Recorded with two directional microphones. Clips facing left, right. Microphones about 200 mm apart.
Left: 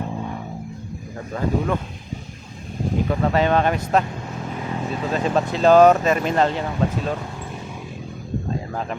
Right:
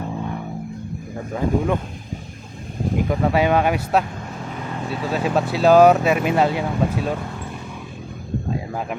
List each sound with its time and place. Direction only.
1.3 s speech: 15° right (ahead or behind)
3.1 s speech: 10° right (ahead or behind)